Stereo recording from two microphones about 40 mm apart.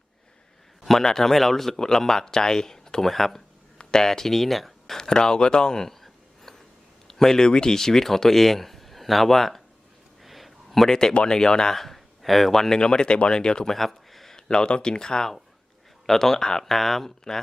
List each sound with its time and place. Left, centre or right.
0.8 s speech: centre
4.9 s speech: centre
6.0 s a sound: centre
7.1 s speech: centre
10.2 s a sound: centre
10.8 s speech: centre
11.1 s speech: left
11.8 s speech: centre
12.8 s speech: left
13.7 s a sound: centre
14.3 s speech: left
16.0 s speech: centre